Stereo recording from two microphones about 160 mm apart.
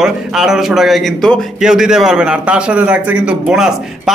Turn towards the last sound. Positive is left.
turn(degrees=-5)  # may be behind; listen again after turning